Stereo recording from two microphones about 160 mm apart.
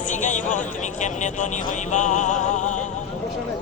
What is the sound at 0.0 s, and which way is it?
Speech, 50° left (ahead or behind).